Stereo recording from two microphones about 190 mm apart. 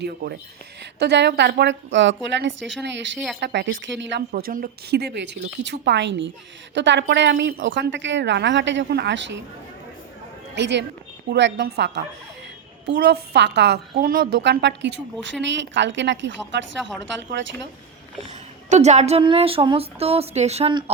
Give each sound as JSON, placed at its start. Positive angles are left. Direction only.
{"t": 0.0, "sound": "a woman's voice", "side_deg": -55}
{"t": 4.3, "sound": "a woman's voice", "side_deg": -50}
{"t": 10.5, "sound": "a woman's voice", "side_deg": -65}
{"t": 18.7, "sound": "speech", "side_deg": -35}